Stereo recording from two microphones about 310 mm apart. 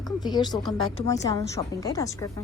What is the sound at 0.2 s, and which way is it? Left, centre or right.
A woman's voice, centre.